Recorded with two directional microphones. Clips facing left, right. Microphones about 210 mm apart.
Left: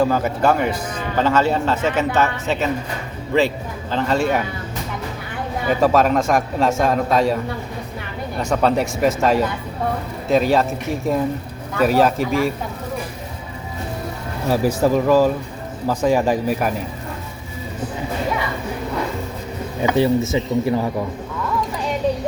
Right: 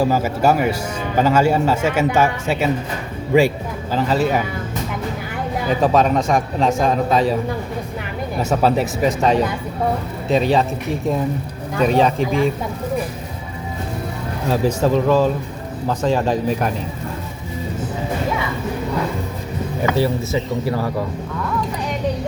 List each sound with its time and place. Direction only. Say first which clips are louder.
0.0 s a man's voice: right 1 dB; 10° right (ahead or behind)
5.8 s a man's voice: left 1 dB; centre (ahead or behind)
8.4 s a man's voice: right 1 dB; 5° right (ahead or behind)
11.8 s a man's voice: even; 5° left (ahead or behind)
14.4 s speech: left 1 dB; 10° left (ahead or behind)
19.8 s speech: left 3 dB; 20° left (ahead or behind)